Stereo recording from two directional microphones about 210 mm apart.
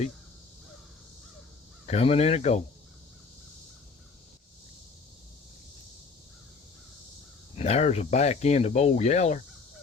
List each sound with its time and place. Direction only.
1.9 s speech: 30° left (ahead or behind)
7.5 s speech: 30° left (ahead or behind)